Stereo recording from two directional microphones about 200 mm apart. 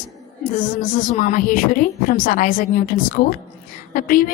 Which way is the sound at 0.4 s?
40° left (ahead or behind).